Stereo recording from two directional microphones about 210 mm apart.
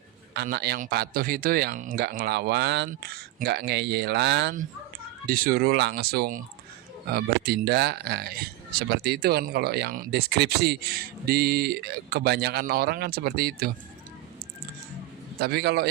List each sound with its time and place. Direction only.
0.3 s speech: 50° right (ahead or behind)
5.2 s speech: 45° right (ahead or behind)
15.4 s speech: 50° right (ahead or behind)